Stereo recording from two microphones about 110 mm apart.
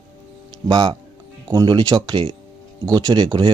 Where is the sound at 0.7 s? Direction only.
40° right (ahead or behind).